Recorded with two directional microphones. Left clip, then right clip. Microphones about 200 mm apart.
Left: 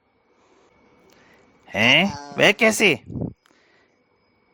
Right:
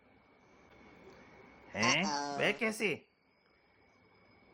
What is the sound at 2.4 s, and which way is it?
Speech, 55° left (ahead or behind).